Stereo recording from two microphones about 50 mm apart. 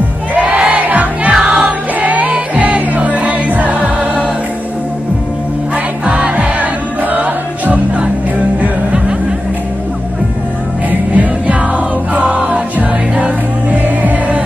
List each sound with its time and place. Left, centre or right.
0.3 s crowd: right
1.3 s music: right
6.0 s music: right
6.6 s music: right
10.9 s music: right